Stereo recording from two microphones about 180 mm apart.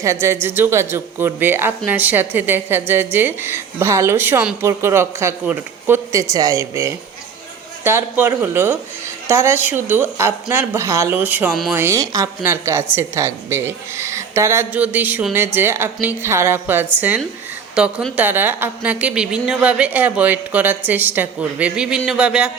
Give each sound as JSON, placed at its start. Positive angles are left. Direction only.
{"t": 0.0, "sound": "speech", "side_deg": -15}